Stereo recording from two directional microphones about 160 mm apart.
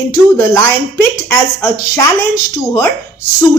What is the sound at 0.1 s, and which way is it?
Speech, 20° left (ahead or behind).